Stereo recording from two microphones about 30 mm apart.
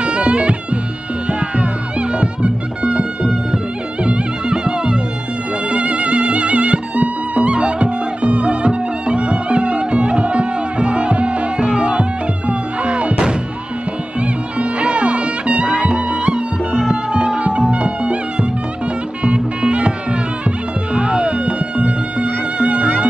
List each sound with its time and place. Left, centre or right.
0.0 s music: right
1.6 s music: right
15.6 s music: centre
15.9 s music: right